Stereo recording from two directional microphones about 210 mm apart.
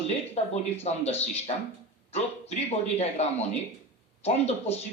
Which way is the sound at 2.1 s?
30° left (ahead or behind).